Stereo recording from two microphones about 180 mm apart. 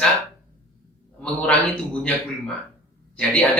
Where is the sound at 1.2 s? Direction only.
5° left (ahead or behind).